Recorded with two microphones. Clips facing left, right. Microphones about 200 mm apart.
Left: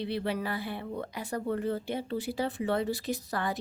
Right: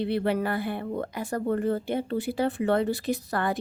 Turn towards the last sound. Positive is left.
turn(degrees=-60)  # may be behind; listen again after turning